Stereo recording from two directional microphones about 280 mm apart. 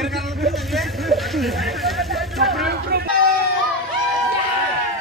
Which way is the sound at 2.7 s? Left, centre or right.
Right.